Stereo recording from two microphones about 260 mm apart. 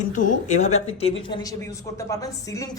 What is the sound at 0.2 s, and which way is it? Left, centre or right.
Speech, left.